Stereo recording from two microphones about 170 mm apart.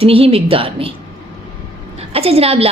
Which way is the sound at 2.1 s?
35° right (ahead or behind).